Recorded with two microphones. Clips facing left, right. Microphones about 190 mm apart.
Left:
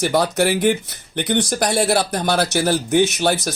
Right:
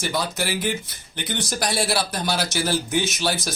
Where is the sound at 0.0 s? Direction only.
60° left (ahead or behind).